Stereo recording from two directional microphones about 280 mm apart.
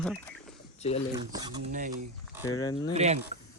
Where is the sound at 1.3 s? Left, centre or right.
Centre.